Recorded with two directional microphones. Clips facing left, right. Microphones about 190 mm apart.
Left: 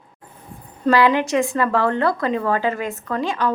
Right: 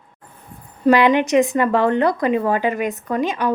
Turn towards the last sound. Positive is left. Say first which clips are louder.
# right 2 dB
turn(degrees=-15)  # may be behind; listen again after turning